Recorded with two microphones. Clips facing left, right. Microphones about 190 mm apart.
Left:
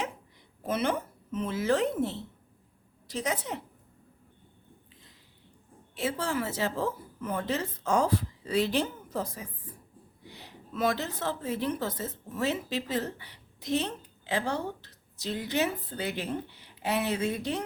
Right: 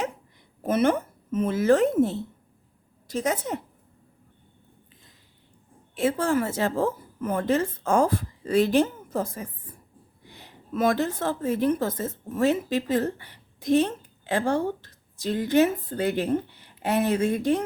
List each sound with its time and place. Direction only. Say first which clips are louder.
0.6 s a woman's voice: right 7 dB; 50° right (ahead or behind)
5.9 s a woman's voice: right 8 dB; 50° right (ahead or behind)